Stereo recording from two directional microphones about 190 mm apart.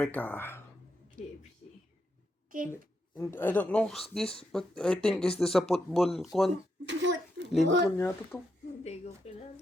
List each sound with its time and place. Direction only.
0.0 s speech: 10° left (ahead or behind)
2.5 s a woman's voice: 45° right (ahead or behind)
3.2 s speech: 10° left (ahead or behind)
6.8 s a child's voice: 70° right (ahead or behind)
7.9 s speech: 10° left (ahead or behind)
8.8 s speech: 35° left (ahead or behind)